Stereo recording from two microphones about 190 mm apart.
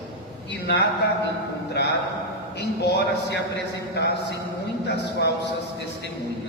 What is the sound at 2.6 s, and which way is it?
A man's voice, 60° left (ahead or behind).